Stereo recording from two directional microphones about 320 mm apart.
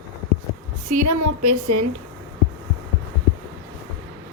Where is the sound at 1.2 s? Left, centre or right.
Right.